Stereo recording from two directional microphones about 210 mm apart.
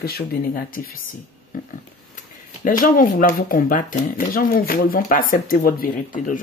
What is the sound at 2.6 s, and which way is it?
Speech, 40° left (ahead or behind).